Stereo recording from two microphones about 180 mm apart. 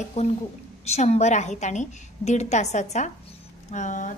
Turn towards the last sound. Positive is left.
turn(degrees=45)  # may be behind; listen again after turning